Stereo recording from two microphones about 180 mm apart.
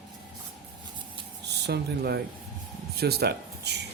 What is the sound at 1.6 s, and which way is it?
Speech, 65° right (ahead or behind).